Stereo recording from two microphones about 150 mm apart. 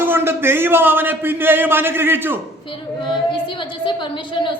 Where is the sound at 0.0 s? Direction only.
15° right (ahead or behind).